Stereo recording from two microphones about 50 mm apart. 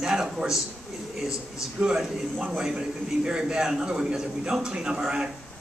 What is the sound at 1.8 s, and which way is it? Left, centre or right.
A man's voice, centre.